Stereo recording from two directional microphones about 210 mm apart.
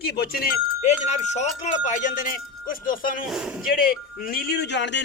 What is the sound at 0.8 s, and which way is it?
Speech, 35° left (ahead or behind).